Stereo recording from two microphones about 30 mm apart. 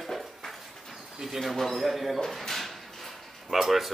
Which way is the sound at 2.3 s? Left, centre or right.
Centre.